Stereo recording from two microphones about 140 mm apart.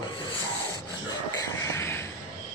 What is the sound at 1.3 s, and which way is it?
Music, 20° left (ahead or behind).